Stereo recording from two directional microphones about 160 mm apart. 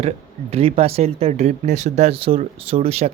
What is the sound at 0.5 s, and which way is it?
Speech, 40° right (ahead or behind).